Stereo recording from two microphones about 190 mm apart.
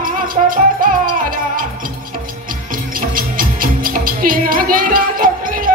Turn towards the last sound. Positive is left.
turn(degrees=-45)  # may be behind; listen again after turning